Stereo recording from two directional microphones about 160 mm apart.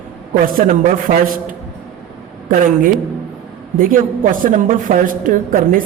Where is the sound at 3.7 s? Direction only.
60° right (ahead or behind).